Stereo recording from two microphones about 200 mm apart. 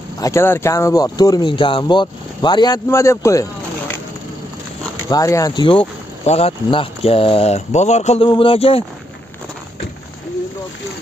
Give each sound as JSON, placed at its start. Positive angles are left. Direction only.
{"t": 0.2, "sound": "speech", "side_deg": 15}
{"t": 5.1, "sound": "speech", "side_deg": 15}